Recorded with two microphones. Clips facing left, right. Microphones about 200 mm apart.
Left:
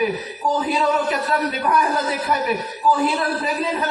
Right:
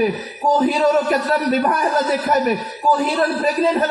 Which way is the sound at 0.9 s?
45° right (ahead or behind).